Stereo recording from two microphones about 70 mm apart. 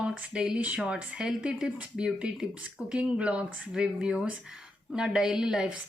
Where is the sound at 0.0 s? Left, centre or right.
Centre.